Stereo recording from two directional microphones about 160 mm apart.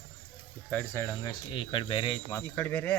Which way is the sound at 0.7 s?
15° left (ahead or behind).